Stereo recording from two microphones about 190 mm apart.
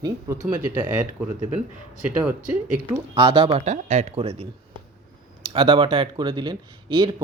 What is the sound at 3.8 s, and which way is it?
Speech, 35° right (ahead or behind).